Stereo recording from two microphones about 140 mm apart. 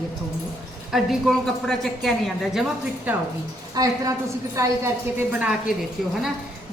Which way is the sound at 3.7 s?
25° right (ahead or behind).